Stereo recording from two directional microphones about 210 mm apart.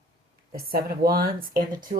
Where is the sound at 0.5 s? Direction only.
45° right (ahead or behind).